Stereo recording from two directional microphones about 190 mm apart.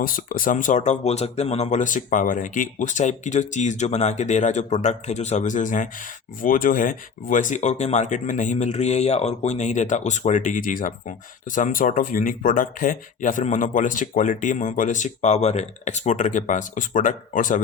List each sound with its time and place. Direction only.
0.0 s speech: 45° left (ahead or behind)